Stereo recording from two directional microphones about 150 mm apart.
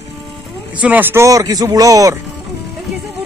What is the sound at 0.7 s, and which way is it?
Speech, 10° right (ahead or behind).